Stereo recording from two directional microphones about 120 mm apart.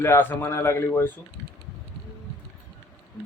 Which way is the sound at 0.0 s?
20° left (ahead or behind).